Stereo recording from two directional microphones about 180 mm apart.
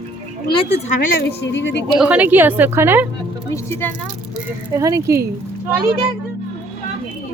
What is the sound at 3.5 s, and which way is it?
Speech, 15° left (ahead or behind).